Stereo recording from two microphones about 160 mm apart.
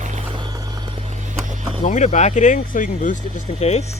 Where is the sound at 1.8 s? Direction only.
50° left (ahead or behind).